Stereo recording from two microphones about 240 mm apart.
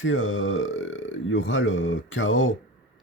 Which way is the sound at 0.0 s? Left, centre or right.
Left.